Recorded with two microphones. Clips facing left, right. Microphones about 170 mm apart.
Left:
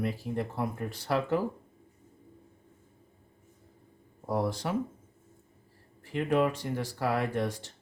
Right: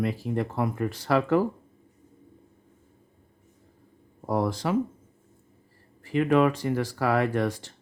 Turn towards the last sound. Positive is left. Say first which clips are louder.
# right 5 dB
turn(degrees=-90)